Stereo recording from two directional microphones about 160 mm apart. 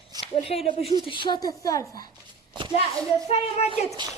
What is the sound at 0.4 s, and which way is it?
A woman's voice, 40° left (ahead or behind).